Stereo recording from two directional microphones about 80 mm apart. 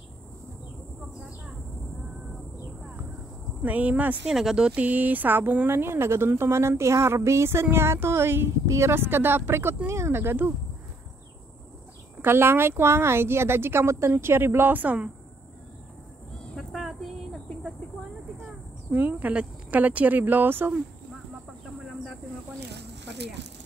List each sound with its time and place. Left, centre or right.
3.6 s speech: centre
4.3 s speech: centre; by 10.5 s right
12.2 s speech: right
16.5 s a sound: centre
18.9 s speech: right